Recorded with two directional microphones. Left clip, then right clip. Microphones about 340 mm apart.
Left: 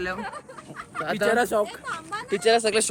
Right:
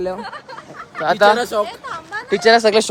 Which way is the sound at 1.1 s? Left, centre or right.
Centre.